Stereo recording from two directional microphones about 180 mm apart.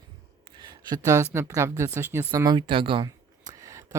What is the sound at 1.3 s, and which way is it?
Speech, 15° right (ahead or behind).